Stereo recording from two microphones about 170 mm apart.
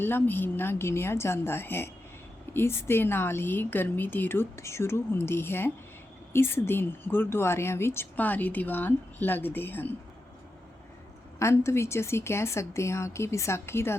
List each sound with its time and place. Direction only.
0.0 s speech: 10° left (ahead or behind)
11.3 s speech: 15° left (ahead or behind)